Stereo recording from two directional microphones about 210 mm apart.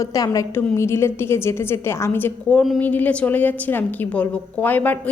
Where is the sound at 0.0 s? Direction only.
15° left (ahead or behind).